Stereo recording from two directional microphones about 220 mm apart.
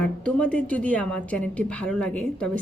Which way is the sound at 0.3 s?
5° left (ahead or behind).